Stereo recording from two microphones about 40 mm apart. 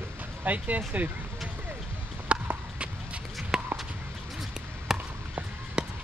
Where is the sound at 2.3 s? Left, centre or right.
Right.